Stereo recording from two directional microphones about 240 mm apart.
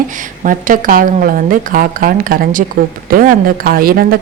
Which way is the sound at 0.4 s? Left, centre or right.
Right.